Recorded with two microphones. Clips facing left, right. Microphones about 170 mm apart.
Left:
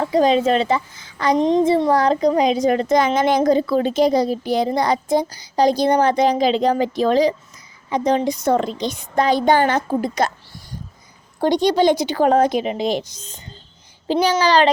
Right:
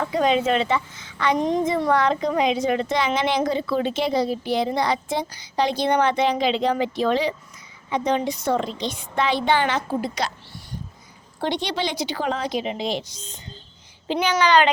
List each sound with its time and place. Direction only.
0.0 s a woman's voice: 35° left (ahead or behind)
1.4 s a woman's voice: 25° left (ahead or behind); by 10.3 s 45° left (ahead or behind)
11.3 s a woman's voice: 45° left (ahead or behind)